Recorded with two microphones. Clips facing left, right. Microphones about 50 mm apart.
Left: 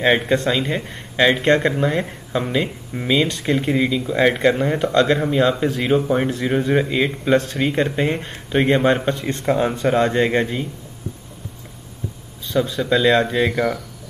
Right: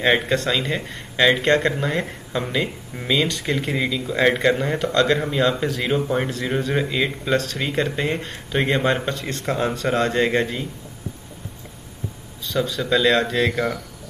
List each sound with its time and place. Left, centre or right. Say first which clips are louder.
0.0 s speech: left 2 dB; centre
12.9 s speech: left 2 dB; centre